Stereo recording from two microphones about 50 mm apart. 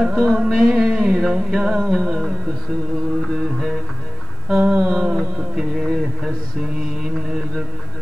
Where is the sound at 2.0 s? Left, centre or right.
Centre.